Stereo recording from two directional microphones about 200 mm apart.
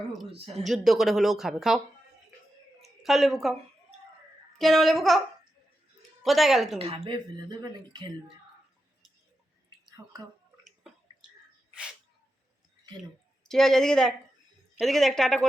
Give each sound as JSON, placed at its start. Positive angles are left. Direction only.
{"t": 0.1, "sound": "a sound", "side_deg": 0}
{"t": 0.6, "sound": "speech", "side_deg": 0}
{"t": 2.8, "sound": "speech", "side_deg": 0}
{"t": 4.5, "sound": "speech", "side_deg": 0}
{"t": 6.2, "sound": "speech", "side_deg": 0}
{"t": 6.7, "sound": "speech", "side_deg": -30}
{"t": 10.0, "sound": "speech", "side_deg": -10}
{"t": 13.4, "sound": "speech", "side_deg": 0}